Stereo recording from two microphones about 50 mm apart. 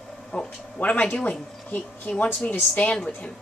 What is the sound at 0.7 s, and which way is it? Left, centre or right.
A woman's voice, left.